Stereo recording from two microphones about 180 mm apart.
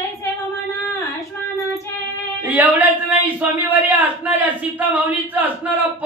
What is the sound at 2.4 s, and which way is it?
A man's voice, 10° right (ahead or behind).